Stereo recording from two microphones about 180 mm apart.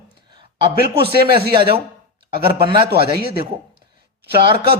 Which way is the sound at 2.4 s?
30° right (ahead or behind).